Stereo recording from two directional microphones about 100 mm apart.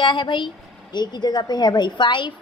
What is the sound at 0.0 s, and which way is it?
A woman's voice, 50° left (ahead or behind).